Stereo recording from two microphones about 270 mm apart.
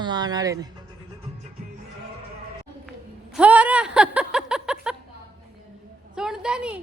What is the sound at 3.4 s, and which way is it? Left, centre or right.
Chuckle, centre.